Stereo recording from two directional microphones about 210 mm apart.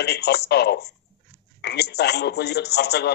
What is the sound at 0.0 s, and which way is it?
A man's voice, 50° left (ahead or behind).